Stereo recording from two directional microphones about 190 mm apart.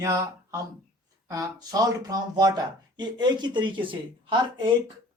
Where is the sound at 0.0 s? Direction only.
15° right (ahead or behind).